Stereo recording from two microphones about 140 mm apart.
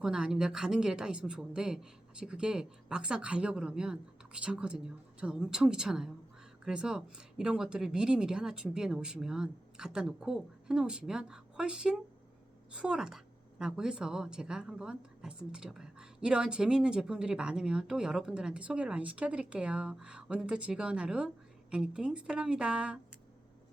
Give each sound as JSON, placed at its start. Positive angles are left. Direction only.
{"t": 0.0, "sound": "a woman's voice", "side_deg": -5}